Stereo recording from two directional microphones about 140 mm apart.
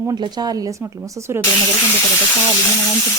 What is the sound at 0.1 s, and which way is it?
Speech, 30° right (ahead or behind).